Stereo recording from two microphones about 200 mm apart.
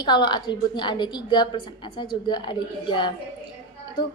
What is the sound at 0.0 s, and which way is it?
A woman's voice, 20° left (ahead or behind).